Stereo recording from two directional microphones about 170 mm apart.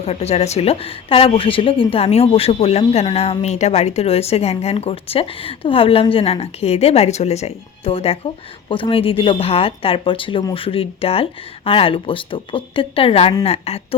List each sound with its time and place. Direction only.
0.0 s a woman's voice: 40° left (ahead or behind)